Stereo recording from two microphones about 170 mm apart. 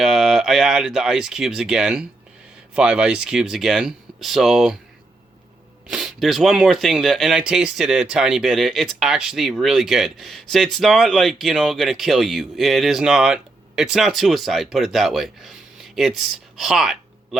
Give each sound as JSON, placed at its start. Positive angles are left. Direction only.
{"t": 0.0, "sound": "speech", "side_deg": 0}
{"t": 5.9, "sound": "speech", "side_deg": 0}